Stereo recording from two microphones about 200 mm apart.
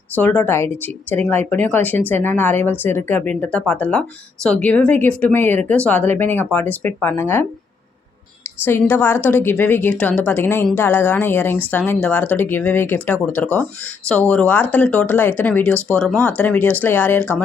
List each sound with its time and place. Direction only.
0.2 s a woman's voice: 10° left (ahead or behind)
8.6 s a woman's voice: 10° left (ahead or behind)